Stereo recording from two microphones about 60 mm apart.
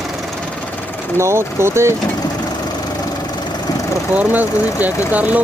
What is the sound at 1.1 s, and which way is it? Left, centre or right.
Speech, right.